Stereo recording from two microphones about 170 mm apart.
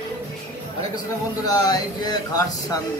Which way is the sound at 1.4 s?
25° left (ahead or behind).